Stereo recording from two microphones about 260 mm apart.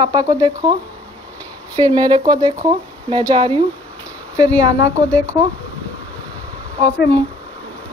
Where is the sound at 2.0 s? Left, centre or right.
Centre.